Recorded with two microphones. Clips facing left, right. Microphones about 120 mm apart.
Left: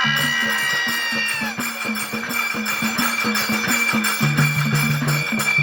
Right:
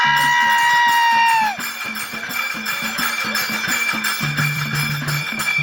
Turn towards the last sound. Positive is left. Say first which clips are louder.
# left 3 dB
turn(degrees=45)  # may be behind; listen again after turning